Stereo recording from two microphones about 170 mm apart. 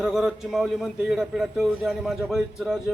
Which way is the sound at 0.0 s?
Centre (ahead or behind).